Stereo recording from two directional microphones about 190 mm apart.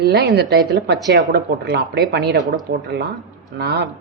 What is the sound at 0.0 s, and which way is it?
Speech, 60° right (ahead or behind).